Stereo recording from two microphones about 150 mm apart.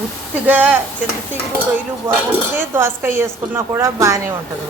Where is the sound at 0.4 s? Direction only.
10° right (ahead or behind).